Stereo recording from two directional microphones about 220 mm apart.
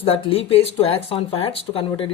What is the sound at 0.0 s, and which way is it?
Speech, 25° left (ahead or behind).